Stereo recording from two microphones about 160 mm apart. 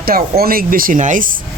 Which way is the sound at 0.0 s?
70° right (ahead or behind).